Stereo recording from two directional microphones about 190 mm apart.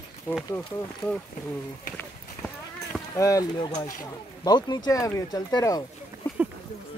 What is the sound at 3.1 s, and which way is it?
Speech, 15° left (ahead or behind).